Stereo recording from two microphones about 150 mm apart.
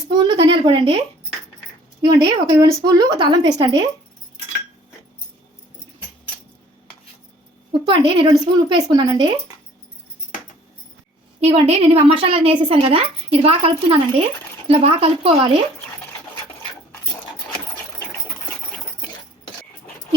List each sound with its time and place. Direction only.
0.2 s speech: 30° right (ahead or behind)
7.7 s a woman's voice: 35° right (ahead or behind)
11.3 s a woman's voice: 45° right (ahead or behind)